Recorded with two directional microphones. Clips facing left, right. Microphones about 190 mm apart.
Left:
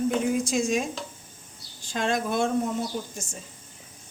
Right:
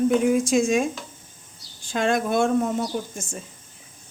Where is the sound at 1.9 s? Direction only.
55° right (ahead or behind).